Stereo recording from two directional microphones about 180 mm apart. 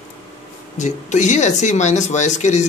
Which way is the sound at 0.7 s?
40° left (ahead or behind).